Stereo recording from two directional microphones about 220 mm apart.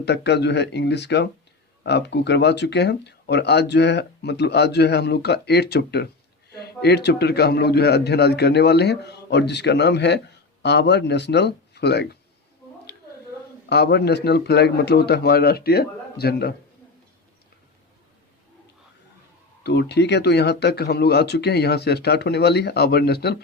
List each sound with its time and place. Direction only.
0.0 s a man's voice: 50° left (ahead or behind)
13.7 s a man's voice: 50° left (ahead or behind)
19.6 s a man's voice: 50° left (ahead or behind)